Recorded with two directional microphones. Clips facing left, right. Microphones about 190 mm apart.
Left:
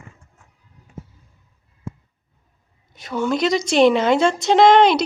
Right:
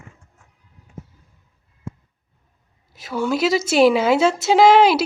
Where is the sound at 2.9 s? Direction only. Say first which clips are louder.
Even; 5° right (ahead or behind).